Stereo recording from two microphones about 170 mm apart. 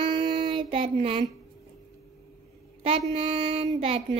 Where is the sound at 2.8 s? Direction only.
35° right (ahead or behind).